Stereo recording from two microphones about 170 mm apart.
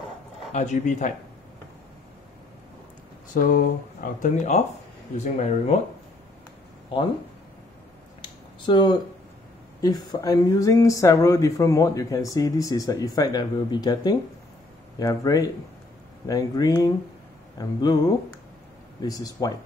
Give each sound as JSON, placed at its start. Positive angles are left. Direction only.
{"t": 0.5, "sound": "speech", "side_deg": 45}
{"t": 3.3, "sound": "speech", "side_deg": 55}
{"t": 8.2, "sound": "a sound", "side_deg": 25}
{"t": 9.8, "sound": "speech", "side_deg": 20}
{"t": 19.0, "sound": "speech", "side_deg": 20}